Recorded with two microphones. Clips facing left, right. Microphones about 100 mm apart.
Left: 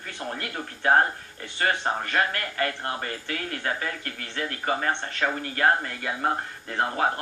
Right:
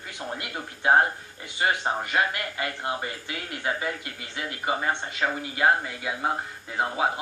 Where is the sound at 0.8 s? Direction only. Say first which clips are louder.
Even; 15° right (ahead or behind).